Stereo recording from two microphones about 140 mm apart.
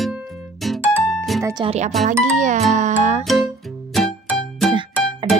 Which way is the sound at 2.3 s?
60° right (ahead or behind).